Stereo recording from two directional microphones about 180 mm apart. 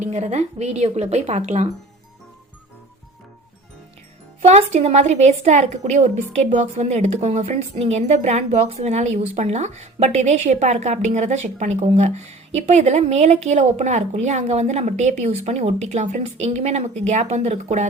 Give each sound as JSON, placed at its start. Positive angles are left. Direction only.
{"t": 0.0, "sound": "a woman's voice", "side_deg": -40}
{"t": 4.4, "sound": "a woman's voice", "side_deg": -35}